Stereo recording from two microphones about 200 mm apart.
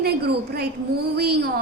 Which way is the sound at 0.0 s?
55° right (ahead or behind).